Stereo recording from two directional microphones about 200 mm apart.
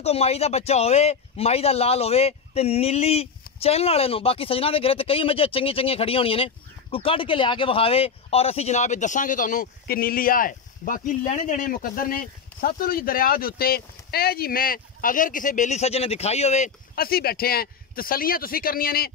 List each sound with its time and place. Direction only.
0.0 s speech: 30° left (ahead or behind); by 19.1 s 50° left (ahead or behind)